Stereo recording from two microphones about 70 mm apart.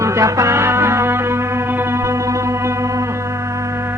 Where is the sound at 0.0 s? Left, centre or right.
Right.